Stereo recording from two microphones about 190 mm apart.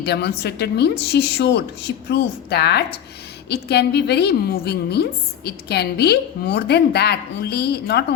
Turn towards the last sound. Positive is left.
turn(degrees=55)  # may be behind; listen again after turning